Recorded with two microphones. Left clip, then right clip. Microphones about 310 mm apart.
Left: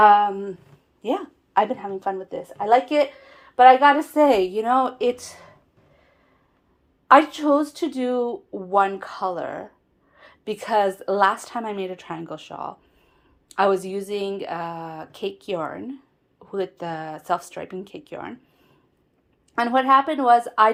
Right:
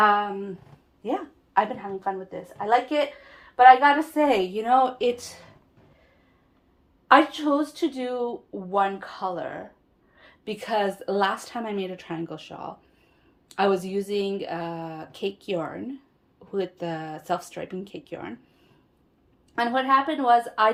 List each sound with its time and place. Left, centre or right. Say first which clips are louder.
0.0 s a sound: left 6 dB; left
1.0 s speech: left 3 dB; left
7.1 s a woman's voice: left 3 dB; centre
19.5 s a woman's voice: left 4 dB; centre